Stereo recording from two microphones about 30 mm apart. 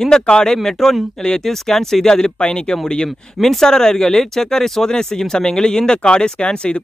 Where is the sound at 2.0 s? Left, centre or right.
Left.